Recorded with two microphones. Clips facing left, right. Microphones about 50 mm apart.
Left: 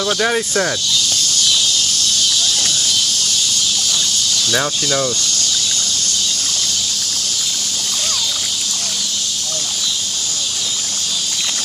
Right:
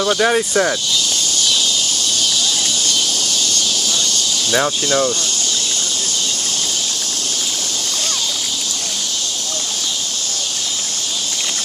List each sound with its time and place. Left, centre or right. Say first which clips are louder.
0.0 s speech: right 2 dB; centre
2.2 s a sound: even; centre
4.5 s speech: right 3 dB; centre